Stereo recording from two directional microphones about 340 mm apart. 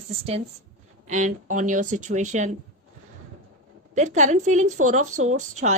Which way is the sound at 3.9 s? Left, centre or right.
Right.